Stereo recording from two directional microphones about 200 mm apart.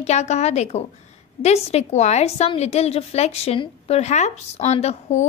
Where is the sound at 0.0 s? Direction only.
35° left (ahead or behind).